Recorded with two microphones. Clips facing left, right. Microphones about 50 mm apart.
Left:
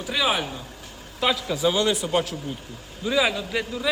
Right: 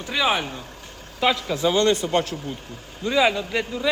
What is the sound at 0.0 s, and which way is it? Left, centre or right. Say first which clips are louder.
A man's voice: right 1 dB; centre.